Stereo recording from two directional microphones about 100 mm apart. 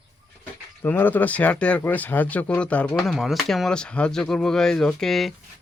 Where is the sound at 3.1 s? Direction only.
Centre (ahead or behind).